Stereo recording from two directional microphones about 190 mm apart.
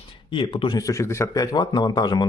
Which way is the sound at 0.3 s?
25° left (ahead or behind).